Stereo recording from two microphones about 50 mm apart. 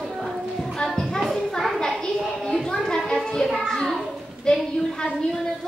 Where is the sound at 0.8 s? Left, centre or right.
Centre.